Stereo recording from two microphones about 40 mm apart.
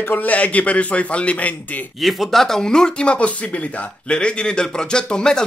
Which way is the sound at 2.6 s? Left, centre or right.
Centre.